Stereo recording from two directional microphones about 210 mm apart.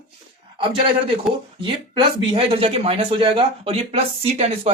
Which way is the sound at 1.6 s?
25° right (ahead or behind).